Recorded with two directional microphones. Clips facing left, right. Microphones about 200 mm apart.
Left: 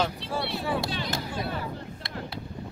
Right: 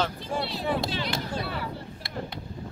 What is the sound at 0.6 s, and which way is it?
Speech, 20° right (ahead or behind).